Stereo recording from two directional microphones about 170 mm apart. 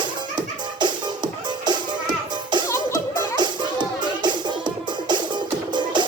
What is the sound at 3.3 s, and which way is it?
Music, 25° right (ahead or behind).